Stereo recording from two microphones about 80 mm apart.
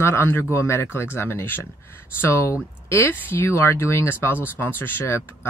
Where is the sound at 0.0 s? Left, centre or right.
Left.